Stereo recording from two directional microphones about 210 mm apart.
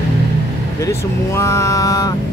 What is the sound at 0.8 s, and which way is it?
Speech, 15° left (ahead or behind).